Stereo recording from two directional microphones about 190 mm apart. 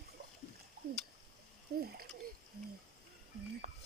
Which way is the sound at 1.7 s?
60° right (ahead or behind).